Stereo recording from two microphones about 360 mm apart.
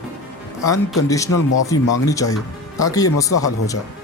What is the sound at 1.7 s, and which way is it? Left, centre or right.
Speech, centre.